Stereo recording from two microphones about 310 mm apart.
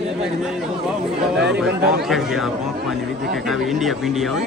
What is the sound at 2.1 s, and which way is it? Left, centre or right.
Speech, centre.